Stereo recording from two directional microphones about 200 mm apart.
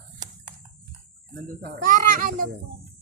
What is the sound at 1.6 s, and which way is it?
Speech, 45° right (ahead or behind).